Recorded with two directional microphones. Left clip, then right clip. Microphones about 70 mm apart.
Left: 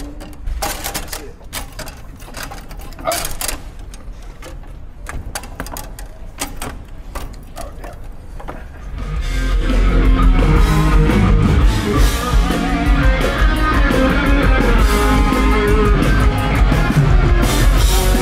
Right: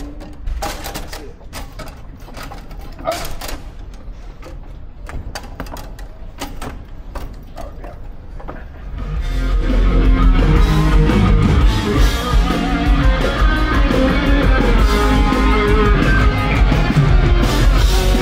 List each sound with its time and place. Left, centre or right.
0.6 s a sound: centre
1.1 s sewing machine: centre; by 3.6 s left
5.0 s typewriter: centre
6.3 s a sound: centre
8.9 s music: centre
13.5 s music: left
13.8 s music: centre
14.8 s music: centre; by 17.3 s right
17.4 s music: centre